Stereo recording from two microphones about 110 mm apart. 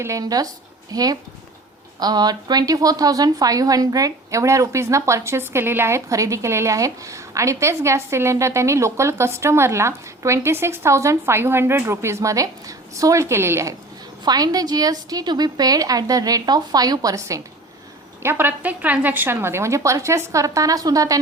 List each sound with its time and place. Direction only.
0.0 s a woman's voice: 30° right (ahead or behind)
14.3 s a woman's voice: 35° right (ahead or behind)